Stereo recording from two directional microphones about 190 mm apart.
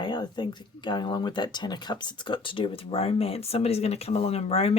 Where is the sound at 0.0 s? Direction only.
25° left (ahead or behind).